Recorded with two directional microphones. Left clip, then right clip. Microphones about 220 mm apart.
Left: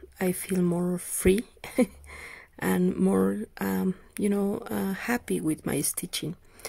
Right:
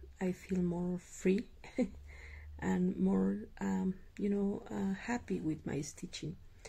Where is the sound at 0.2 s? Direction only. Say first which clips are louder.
Left 10 dB; 45° left (ahead or behind).